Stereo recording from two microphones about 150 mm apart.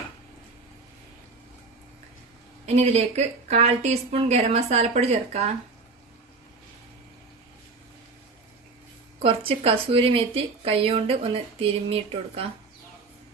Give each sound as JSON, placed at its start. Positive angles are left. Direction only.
{"t": 2.6, "sound": "speech", "side_deg": -45}
{"t": 9.1, "sound": "speech", "side_deg": -40}